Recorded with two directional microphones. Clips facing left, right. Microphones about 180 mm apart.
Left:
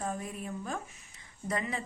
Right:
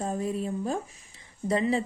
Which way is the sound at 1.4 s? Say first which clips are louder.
Right 9 dB; 30° right (ahead or behind).